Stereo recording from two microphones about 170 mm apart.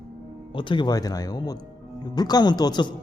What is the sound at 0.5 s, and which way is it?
Speech, 30° left (ahead or behind).